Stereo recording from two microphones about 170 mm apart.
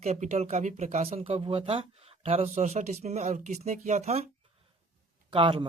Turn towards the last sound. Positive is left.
turn(degrees=-30)  # may be behind; listen again after turning